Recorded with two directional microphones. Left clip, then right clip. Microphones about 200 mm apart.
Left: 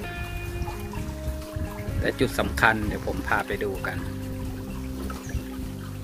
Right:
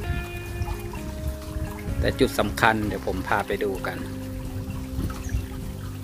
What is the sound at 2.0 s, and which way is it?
Speech, 20° right (ahead or behind).